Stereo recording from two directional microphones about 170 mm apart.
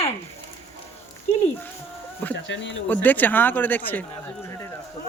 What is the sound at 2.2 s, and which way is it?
Speech, 10° left (ahead or behind).